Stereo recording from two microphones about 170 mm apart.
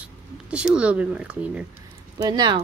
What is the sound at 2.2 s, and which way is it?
Speech, 25° right (ahead or behind).